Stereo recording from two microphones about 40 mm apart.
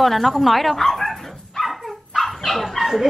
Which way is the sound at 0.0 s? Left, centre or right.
Centre.